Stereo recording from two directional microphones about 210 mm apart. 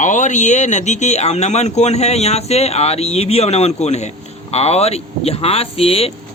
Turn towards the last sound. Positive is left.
turn(degrees=30)  # may be behind; listen again after turning